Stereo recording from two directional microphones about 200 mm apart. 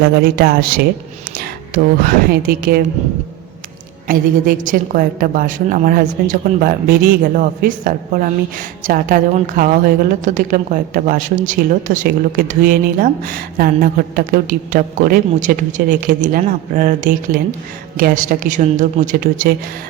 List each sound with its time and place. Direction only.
0.0 s a woman's voice: 50° right (ahead or behind)
4.0 s a woman's voice: 45° right (ahead or behind)